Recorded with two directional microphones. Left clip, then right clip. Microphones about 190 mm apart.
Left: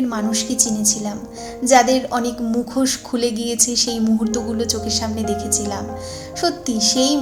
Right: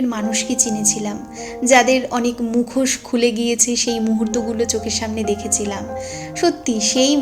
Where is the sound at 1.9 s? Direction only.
30° right (ahead or behind).